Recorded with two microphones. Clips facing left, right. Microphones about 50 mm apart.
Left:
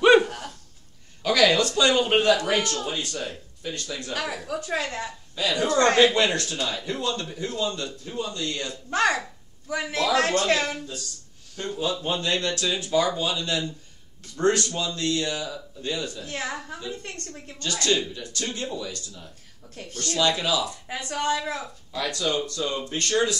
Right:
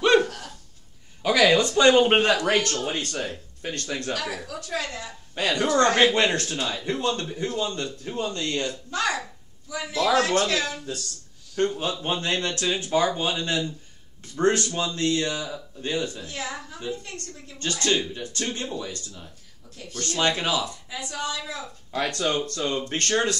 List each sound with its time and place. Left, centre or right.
0.0 s a sound: centre
1.2 s a man's voice: centre; by 4.1 s right
4.2 s a woman's voice: left
5.3 s a man's voice: right
8.9 s a woman's voice: left
11.5 s speech: right
12.0 s a man's voice: right
16.3 s a woman's voice: left
17.6 s a man's voice: right
19.7 s speech: left
20.0 s a man's voice: right
20.9 s a woman's voice: left
21.9 s a man's voice: right